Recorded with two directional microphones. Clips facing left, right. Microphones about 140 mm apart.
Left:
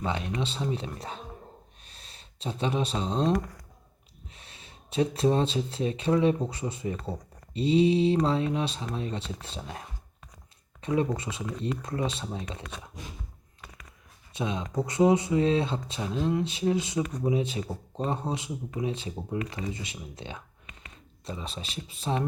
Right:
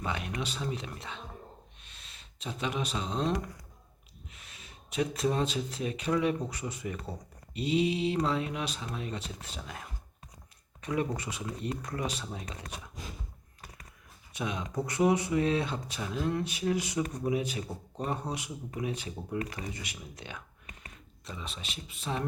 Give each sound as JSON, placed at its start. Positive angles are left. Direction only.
{"t": 0.0, "sound": "speech", "side_deg": 30}
{"t": 1.8, "sound": "a sound", "side_deg": 35}
{"t": 4.3, "sound": "speech", "side_deg": 30}
{"t": 14.3, "sound": "speech", "side_deg": 25}